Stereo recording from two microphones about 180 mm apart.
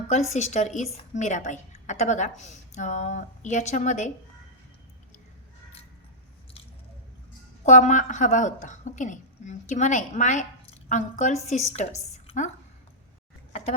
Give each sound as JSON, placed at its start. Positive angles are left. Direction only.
{"t": 0.1, "sound": "a woman's voice", "side_deg": 40}
{"t": 7.6, "sound": "a woman's voice", "side_deg": 40}